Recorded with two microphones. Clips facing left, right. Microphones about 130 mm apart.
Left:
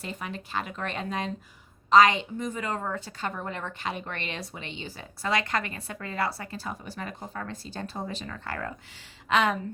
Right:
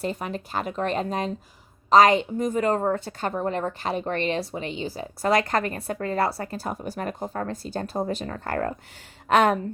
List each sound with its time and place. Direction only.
0.0 s a woman's voice: 40° right (ahead or behind)